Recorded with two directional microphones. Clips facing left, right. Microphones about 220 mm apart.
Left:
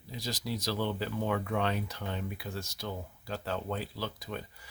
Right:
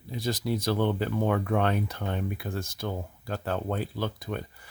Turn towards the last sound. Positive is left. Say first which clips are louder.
# right 5 dB
turn(degrees=-55)  # may be behind; listen again after turning